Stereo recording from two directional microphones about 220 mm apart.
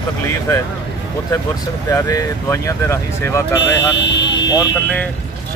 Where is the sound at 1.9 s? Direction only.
15° left (ahead or behind).